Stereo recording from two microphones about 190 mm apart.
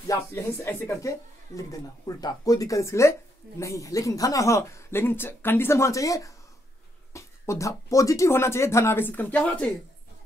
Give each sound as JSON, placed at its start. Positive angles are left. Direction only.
{"t": 0.1, "sound": "speech", "side_deg": 10}